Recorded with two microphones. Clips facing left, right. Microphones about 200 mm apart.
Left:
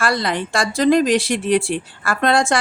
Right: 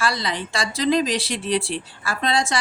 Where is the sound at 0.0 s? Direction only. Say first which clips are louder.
Left 5 dB; 55° left (ahead or behind).